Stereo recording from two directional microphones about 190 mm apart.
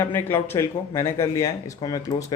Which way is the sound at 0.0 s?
10° left (ahead or behind).